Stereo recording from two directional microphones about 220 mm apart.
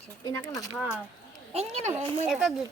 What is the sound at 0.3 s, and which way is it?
Speech, 15° left (ahead or behind).